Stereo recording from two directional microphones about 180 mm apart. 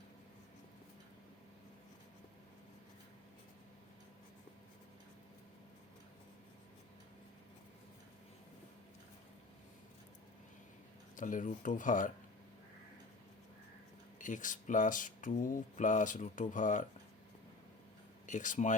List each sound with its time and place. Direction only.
11.2 s speech: 45° left (ahead or behind)
14.2 s speech: 45° left (ahead or behind)
18.3 s speech: 45° left (ahead or behind)